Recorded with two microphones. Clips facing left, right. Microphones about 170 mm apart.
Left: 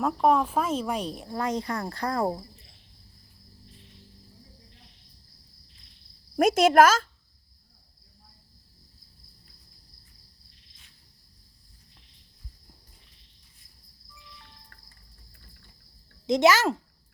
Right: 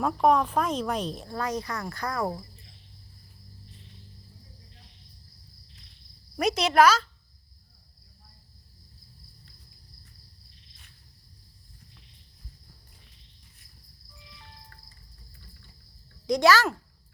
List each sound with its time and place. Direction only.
0.0 s speech: 5° left (ahead or behind); by 2.3 s 30° left (ahead or behind)
6.3 s a woman's voice: 50° left (ahead or behind)
16.2 s speech: 20° left (ahead or behind)